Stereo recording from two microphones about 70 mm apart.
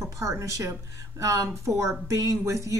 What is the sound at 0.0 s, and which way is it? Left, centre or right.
A woman's voice, right.